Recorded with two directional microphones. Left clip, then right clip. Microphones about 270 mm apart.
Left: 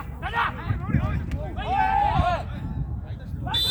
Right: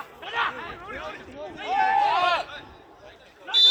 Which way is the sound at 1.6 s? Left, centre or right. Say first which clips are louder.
Even; centre.